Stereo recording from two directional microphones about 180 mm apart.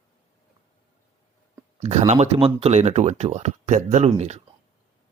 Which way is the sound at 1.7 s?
35° right (ahead or behind).